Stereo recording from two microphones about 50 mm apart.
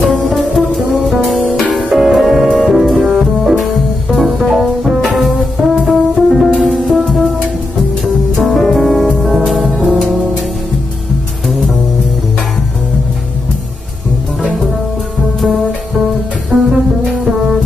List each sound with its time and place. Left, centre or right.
0.3 s music: centre
5.0 s music: centre
16.5 s music: right